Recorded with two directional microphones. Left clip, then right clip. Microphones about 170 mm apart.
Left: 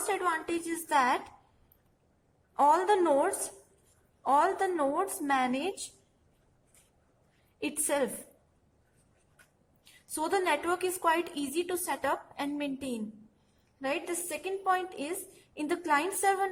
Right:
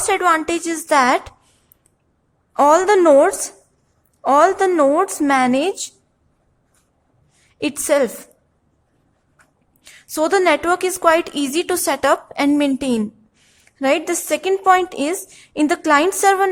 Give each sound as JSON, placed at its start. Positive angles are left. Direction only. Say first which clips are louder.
{"t": 0.1, "sound": "a woman's voice", "louder": "right 15 dB", "side_deg": -35}
{"t": 2.5, "sound": "a woman's voice", "louder": "right 12 dB", "side_deg": -25}
{"t": 7.6, "sound": "a woman's voice", "louder": "right 14 dB", "side_deg": -25}
{"t": 9.8, "sound": "a woman's voice", "louder": "right 15 dB", "side_deg": -25}